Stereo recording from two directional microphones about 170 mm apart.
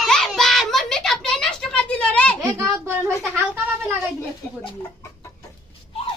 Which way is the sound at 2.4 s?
20° right (ahead or behind).